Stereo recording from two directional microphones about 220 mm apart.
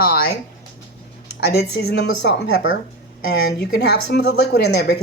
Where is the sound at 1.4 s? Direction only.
45° left (ahead or behind).